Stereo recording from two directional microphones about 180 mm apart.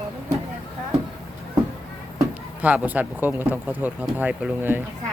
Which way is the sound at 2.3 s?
10° right (ahead or behind).